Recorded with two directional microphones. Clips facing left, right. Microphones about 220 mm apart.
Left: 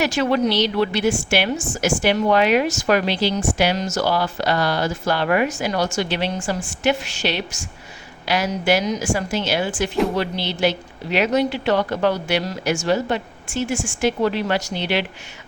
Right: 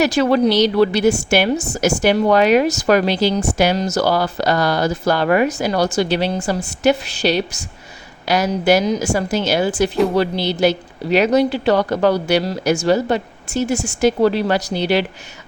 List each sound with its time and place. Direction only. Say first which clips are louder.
0.0 s a woman's voice: right 4 dB; 40° right (ahead or behind)